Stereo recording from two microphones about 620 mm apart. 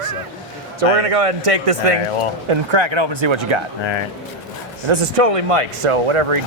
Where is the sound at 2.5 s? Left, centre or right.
Right.